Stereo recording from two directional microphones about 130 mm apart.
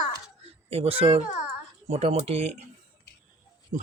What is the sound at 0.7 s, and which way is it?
Speech, 50° right (ahead or behind).